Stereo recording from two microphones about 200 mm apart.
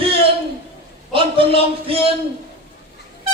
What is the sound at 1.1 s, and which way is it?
Speech, 25° right (ahead or behind).